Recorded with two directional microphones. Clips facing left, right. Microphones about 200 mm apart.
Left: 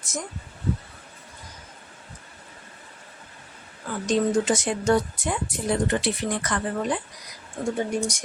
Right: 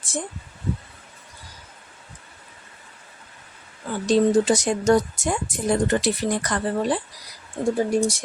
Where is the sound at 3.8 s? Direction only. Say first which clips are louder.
Right 4 dB; 30° right (ahead or behind).